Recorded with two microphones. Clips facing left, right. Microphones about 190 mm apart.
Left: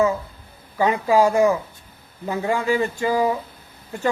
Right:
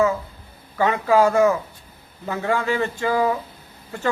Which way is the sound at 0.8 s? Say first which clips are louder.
Even; 15° left (ahead or behind).